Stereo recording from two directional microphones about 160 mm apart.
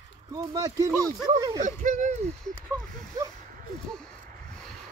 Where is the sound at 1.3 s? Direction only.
35° right (ahead or behind).